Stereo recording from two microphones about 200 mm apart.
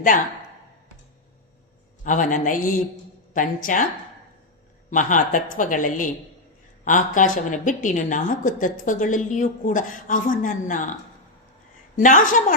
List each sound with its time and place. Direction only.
2.0 s a woman's voice: 40° left (ahead or behind)
4.9 s a woman's voice: 40° left (ahead or behind)
11.9 s a woman's voice: 40° left (ahead or behind)